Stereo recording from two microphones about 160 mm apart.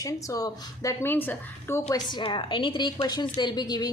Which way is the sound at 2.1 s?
30° left (ahead or behind).